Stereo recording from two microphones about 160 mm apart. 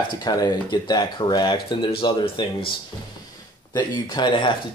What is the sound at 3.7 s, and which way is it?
Speech, 25° left (ahead or behind).